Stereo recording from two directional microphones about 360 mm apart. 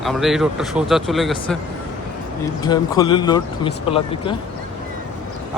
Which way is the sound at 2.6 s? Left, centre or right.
Centre.